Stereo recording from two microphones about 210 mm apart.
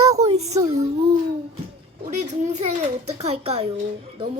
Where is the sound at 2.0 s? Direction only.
30° right (ahead or behind).